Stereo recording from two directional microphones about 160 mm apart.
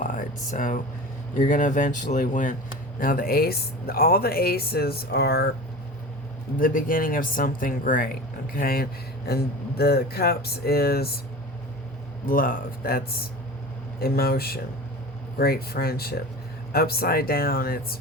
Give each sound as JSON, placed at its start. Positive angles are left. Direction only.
{"t": 0.0, "sound": "a sound", "side_deg": 55}
{"t": 1.4, "sound": "speech", "side_deg": 55}
{"t": 6.6, "sound": "speech", "side_deg": 60}
{"t": 12.2, "sound": "speech", "side_deg": 60}
{"t": 14.0, "sound": "speech", "side_deg": 70}